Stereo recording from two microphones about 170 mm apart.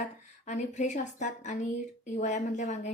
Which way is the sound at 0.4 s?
45° left (ahead or behind).